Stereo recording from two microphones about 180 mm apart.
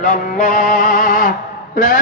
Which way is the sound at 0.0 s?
45° left (ahead or behind).